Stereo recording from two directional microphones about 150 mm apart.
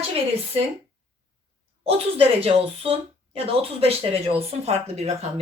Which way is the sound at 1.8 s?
40° right (ahead or behind).